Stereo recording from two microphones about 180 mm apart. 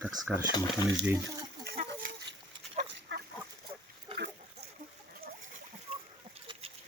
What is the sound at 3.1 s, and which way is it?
Fowl, 90° right.